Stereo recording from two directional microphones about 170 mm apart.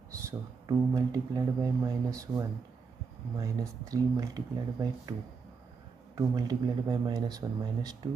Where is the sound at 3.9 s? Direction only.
20° right (ahead or behind).